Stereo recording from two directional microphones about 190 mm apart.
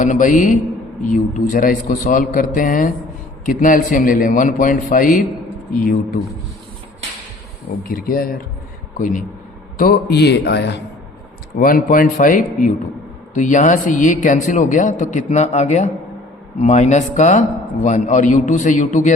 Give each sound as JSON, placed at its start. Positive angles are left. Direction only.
{"t": 0.0, "sound": "a man's voice", "side_deg": 40}
{"t": 7.9, "sound": "a man's voice", "side_deg": 50}
{"t": 11.5, "sound": "a man's voice", "side_deg": 45}